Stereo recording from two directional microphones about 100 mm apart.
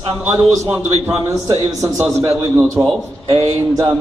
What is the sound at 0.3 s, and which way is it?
A man's voice, 25° right (ahead or behind).